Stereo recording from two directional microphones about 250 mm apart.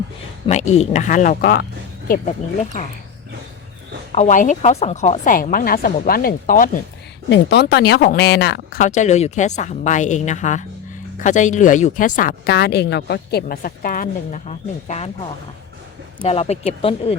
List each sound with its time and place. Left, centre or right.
0.4 s speech: left
4.1 s speech: left
16.2 s speech: left